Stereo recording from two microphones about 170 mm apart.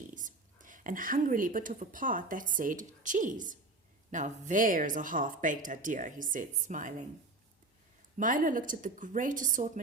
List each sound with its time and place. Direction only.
0.1 s speech: 50° right (ahead or behind)
8.2 s speech: 50° right (ahead or behind)